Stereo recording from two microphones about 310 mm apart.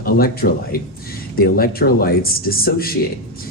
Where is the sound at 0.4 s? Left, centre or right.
Left.